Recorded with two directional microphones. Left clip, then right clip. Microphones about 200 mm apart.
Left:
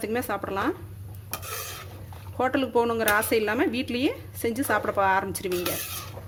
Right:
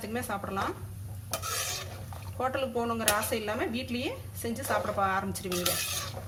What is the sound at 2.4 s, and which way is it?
Speech, 60° left (ahead or behind).